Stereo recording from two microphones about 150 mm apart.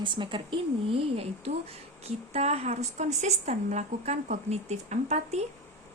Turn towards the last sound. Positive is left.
turn(degrees=-45)  # may be behind; listen again after turning